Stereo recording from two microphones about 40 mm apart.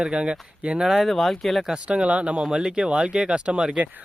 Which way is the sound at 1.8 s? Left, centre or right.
Right.